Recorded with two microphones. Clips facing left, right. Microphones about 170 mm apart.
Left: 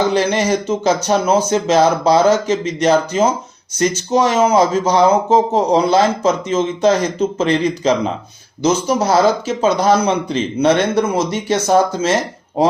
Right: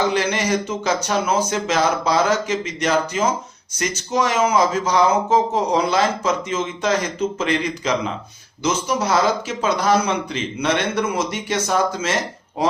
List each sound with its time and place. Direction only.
0.1 s speech: 30° left (ahead or behind)